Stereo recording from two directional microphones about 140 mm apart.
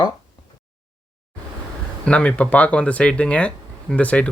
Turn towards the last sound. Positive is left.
turn(degrees=10)  # may be behind; listen again after turning